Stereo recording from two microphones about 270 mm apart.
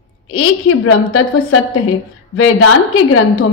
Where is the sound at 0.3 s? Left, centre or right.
Left.